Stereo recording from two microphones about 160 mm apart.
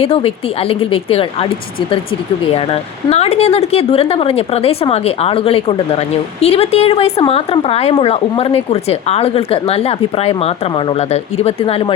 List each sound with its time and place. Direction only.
0.0 s a woman's voice: 35° left (ahead or behind)
3.1 s a woman's voice: 40° left (ahead or behind)